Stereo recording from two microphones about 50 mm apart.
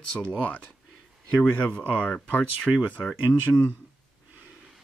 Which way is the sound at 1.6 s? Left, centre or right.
Left.